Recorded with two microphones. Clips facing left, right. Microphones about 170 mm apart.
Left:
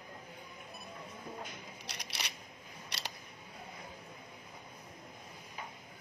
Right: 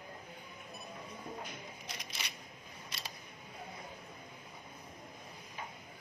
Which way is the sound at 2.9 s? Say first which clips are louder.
Left 3 dB; 75° left (ahead or behind).